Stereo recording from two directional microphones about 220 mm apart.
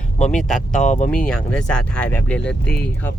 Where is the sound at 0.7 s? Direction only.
35° left (ahead or behind).